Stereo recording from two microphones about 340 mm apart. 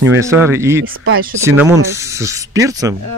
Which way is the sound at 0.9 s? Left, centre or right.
Right.